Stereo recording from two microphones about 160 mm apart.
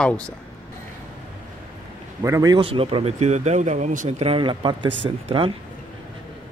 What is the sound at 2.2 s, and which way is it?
Speech, 20° right (ahead or behind).